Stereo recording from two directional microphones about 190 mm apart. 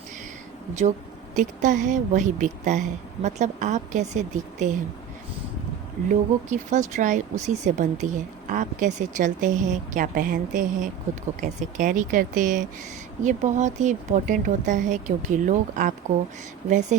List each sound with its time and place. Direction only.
1.4 s speech: 40° right (ahead or behind)
6.1 s speech: 40° right (ahead or behind)